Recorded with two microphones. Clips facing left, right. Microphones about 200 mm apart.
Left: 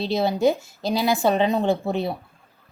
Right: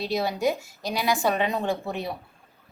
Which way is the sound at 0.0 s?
25° left (ahead or behind).